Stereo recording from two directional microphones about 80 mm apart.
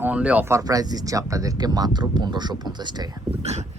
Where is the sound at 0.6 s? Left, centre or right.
Right.